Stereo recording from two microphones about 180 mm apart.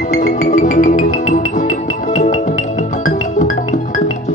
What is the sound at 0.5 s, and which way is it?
Music, 45° left (ahead or behind).